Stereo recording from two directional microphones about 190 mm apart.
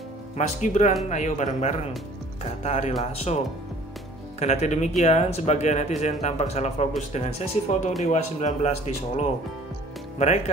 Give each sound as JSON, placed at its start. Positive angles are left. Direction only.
{"t": 0.4, "sound": "speech", "side_deg": 40}
{"t": 4.4, "sound": "speech", "side_deg": 35}